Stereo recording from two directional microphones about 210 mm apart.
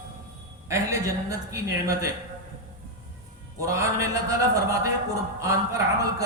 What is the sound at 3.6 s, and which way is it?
Speech, 15° right (ahead or behind).